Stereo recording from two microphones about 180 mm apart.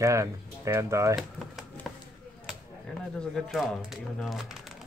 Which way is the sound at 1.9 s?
Centre (ahead or behind).